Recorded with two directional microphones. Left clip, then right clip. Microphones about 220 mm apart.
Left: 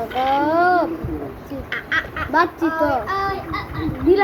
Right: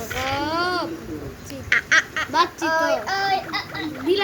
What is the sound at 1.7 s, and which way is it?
Duck, 40° right (ahead or behind).